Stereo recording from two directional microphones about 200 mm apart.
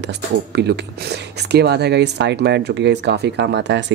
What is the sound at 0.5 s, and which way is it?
Speech, 55° right (ahead or behind).